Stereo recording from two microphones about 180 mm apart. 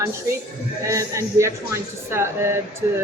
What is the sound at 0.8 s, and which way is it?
Speech, 15° right (ahead or behind).